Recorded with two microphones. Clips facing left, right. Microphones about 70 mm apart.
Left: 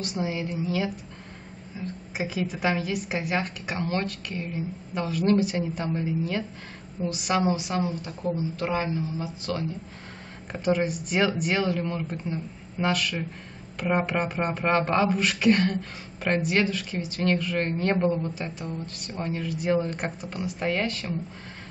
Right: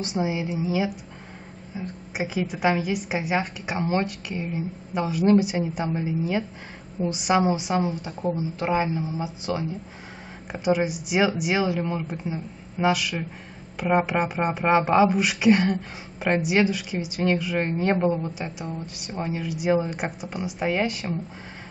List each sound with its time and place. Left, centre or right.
0.0 s speech: centre
2.1 s speech: centre